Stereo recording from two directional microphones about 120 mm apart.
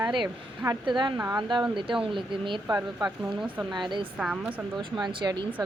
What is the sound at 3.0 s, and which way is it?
A woman's voice, 5° right (ahead or behind).